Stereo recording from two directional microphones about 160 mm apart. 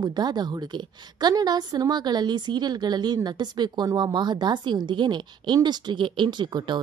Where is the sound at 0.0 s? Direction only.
25° right (ahead or behind).